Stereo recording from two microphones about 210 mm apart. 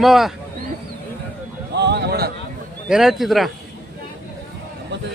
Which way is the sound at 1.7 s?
55° right (ahead or behind).